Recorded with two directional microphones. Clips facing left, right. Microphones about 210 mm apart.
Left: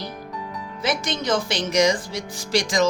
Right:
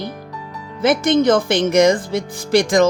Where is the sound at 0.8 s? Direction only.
55° right (ahead or behind).